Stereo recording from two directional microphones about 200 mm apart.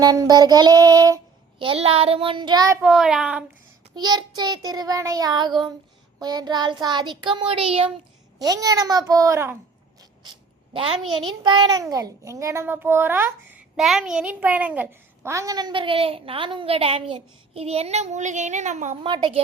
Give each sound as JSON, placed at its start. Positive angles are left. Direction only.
{"t": 0.0, "sound": "a child's voice", "side_deg": -20}
{"t": 2.8, "sound": "a child's voice", "side_deg": 0}
{"t": 3.9, "sound": "a child's voice", "side_deg": -20}
{"t": 8.4, "sound": "a child's voice", "side_deg": -20}
{"t": 11.1, "sound": "a child's voice", "side_deg": -25}
{"t": 19.0, "sound": "a child's voice", "side_deg": -25}